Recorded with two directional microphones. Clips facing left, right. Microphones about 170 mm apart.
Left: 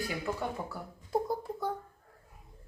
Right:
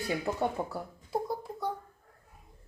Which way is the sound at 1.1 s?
Centre (ahead or behind).